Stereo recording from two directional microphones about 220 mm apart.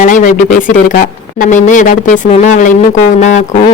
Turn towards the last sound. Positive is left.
turn(degrees=35)  # may be behind; listen again after turning